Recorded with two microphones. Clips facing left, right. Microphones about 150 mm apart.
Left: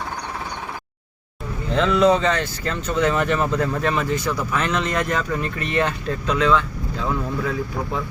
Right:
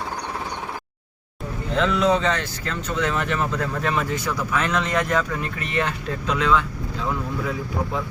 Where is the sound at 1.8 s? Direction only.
Centre (ahead or behind).